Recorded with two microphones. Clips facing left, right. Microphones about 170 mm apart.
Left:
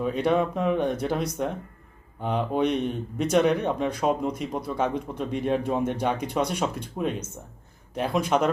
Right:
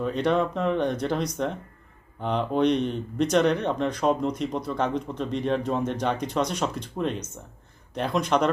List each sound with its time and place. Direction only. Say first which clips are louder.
0.0 s speech: even; 5° left (ahead or behind)